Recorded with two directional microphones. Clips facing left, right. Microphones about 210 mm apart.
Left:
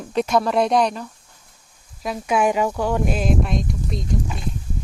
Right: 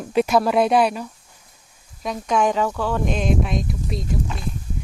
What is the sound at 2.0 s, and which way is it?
Speech, 5° left (ahead or behind).